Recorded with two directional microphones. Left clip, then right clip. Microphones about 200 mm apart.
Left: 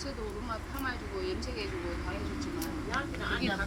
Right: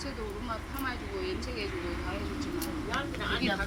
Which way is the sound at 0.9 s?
10° left (ahead or behind).